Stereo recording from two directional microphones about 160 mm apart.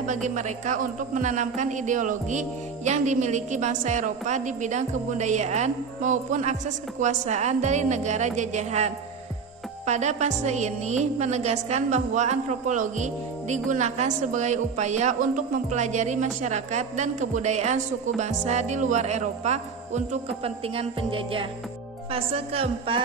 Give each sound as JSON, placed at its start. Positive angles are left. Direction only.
{"t": 0.0, "sound": "a woman's voice", "side_deg": -50}
{"t": 22.1, "sound": "music", "side_deg": -40}